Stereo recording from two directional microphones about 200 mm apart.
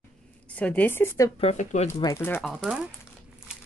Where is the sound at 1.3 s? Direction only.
30° left (ahead or behind).